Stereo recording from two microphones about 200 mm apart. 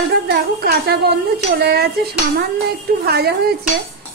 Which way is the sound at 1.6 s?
50° right (ahead or behind).